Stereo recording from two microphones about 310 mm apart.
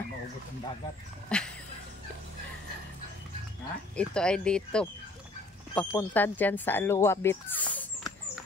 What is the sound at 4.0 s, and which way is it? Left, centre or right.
Speech, centre.